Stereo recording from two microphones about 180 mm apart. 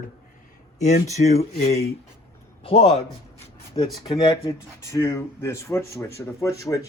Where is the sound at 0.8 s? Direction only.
40° left (ahead or behind).